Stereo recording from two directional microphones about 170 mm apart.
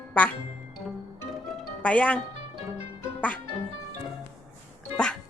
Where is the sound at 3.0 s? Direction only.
10° left (ahead or behind).